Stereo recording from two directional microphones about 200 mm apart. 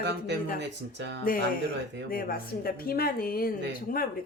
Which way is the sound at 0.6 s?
60° right (ahead or behind).